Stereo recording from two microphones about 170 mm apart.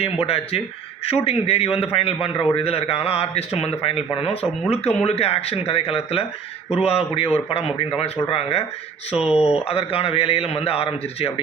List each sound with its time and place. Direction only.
0.0 s a man's voice: 35° left (ahead or behind)
9.1 s speech: 5° right (ahead or behind)
9.6 s a man's voice: 35° left (ahead or behind)